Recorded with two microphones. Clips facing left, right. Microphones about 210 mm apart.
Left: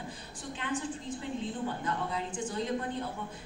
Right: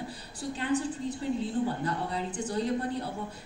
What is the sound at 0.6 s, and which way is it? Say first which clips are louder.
Speech: right 6 dB; 40° right (ahead or behind).